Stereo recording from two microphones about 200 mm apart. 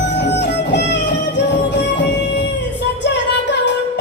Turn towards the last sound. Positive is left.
turn(degrees=60)  # may be behind; listen again after turning